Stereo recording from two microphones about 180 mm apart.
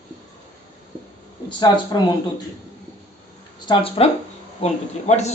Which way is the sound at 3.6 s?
30° left (ahead or behind).